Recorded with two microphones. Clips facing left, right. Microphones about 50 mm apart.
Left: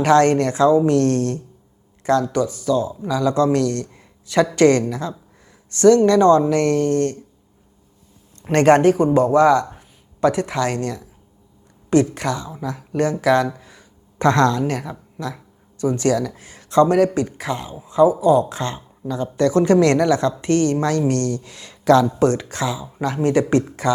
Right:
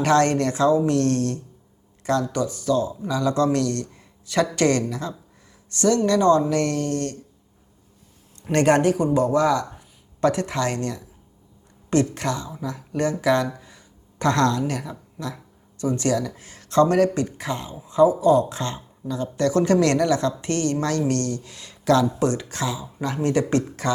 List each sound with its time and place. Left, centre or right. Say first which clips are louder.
0.0 s a man's voice: left 4 dB; left
8.4 s a man's voice: left 5 dB; left
13.5 s a sound: left 2 dB; centre
14.2 s speech: left 4 dB; left
14.8 s speech: left 3 dB; centre
15.8 s speech: left 4 dB; left
22.9 s speech: left 4 dB; centre
23.1 s speech: left 4 dB; left